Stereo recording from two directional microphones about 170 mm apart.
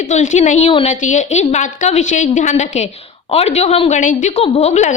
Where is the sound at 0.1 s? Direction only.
45° left (ahead or behind).